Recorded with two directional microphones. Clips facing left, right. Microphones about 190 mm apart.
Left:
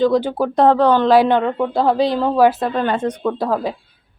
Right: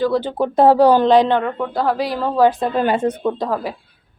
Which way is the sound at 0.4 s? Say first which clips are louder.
Right 3 dB; 5° right (ahead or behind).